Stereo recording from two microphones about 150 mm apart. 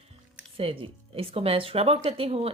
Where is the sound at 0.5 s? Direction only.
40° right (ahead or behind).